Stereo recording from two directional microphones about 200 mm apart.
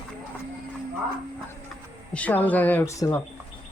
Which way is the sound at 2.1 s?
5° left (ahead or behind).